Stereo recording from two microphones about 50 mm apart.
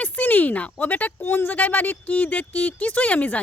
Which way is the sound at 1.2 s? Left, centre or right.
Left.